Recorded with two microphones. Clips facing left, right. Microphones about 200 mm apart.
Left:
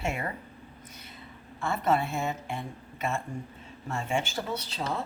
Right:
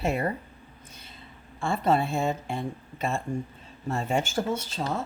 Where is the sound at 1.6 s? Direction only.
30° right (ahead or behind); by 5.0 s 50° right (ahead or behind).